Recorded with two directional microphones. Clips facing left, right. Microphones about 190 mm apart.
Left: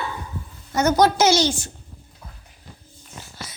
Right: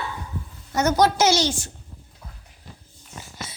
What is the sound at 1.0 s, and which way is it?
Speech, 50° left (ahead or behind).